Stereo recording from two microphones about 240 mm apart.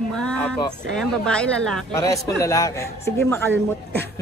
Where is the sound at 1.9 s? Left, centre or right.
Centre.